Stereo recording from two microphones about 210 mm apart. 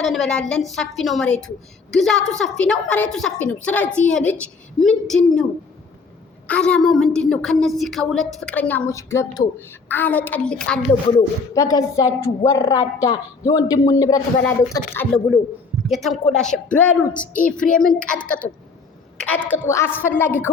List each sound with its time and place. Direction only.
0.0 s a woman's voice: centre (ahead or behind)
6.5 s a woman's voice: 5° left (ahead or behind)
11.2 s a woman's voice: 15° left (ahead or behind)
17.3 s speech: 40° left (ahead or behind)
17.7 s a woman's voice: 5° left (ahead or behind)